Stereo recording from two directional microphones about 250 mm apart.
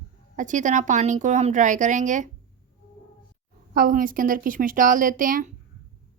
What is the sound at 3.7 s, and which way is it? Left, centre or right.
A woman's voice, right.